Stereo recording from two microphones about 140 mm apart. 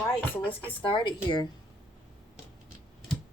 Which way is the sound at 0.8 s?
35° left (ahead or behind).